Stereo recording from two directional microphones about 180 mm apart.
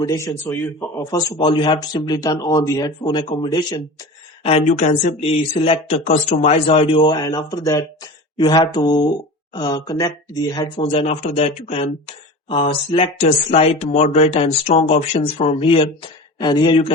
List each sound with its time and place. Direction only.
0.0 s speech: 20° left (ahead or behind)
4.4 s speech: 40° left (ahead or behind)